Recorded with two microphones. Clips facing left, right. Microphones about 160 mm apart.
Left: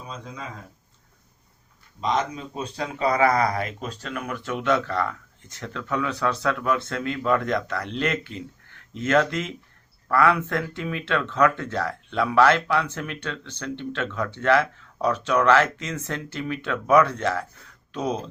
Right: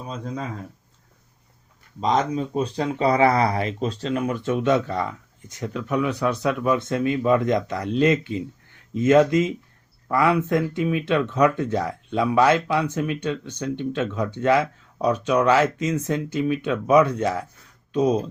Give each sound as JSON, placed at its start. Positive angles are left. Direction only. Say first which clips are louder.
{"t": 2.0, "sound": "speech", "louder": "right 4 dB", "side_deg": -35}